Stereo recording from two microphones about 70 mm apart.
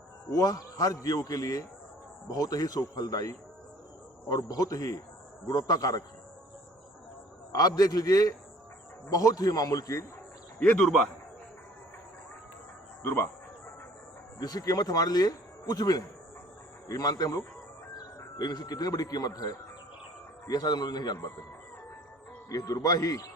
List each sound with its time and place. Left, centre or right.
0.3 s a man's voice: left
7.5 s a man's voice: left
10.6 s speech: centre
13.0 s speech: left
14.3 s a man's voice: left
22.4 s a man's voice: left